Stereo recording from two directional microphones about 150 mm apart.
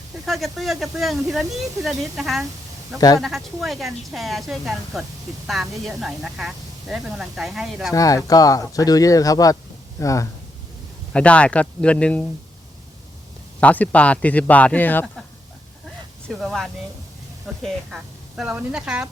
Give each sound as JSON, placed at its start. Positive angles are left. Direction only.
{"t": 0.3, "sound": "speech", "side_deg": 0}
{"t": 7.9, "sound": "speech", "side_deg": 25}
{"t": 11.1, "sound": "speech", "side_deg": 10}
{"t": 13.6, "sound": "speech", "side_deg": 10}
{"t": 16.3, "sound": "speech", "side_deg": 0}